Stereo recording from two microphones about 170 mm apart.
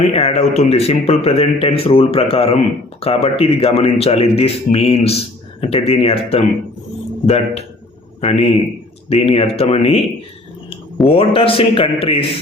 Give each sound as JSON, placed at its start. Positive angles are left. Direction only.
{"t": 0.1, "sound": "speech", "side_deg": 40}
{"t": 11.0, "sound": "speech", "side_deg": 35}